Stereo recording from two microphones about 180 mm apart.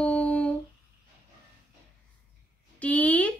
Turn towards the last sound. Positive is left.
turn(degrees=10)  # may be behind; listen again after turning